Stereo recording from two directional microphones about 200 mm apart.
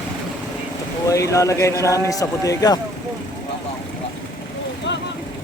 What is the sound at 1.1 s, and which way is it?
Speech, 15° left (ahead or behind).